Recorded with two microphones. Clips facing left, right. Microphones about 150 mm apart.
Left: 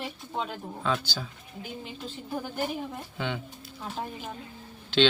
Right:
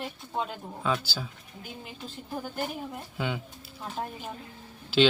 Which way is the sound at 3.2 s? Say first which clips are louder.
Right 1 dB; 5° right (ahead or behind).